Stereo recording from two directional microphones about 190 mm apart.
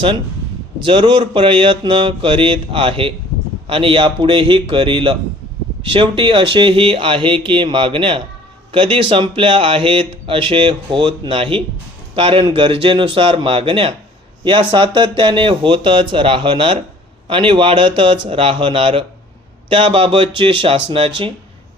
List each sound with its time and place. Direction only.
0.9 s speech: 25° right (ahead or behind)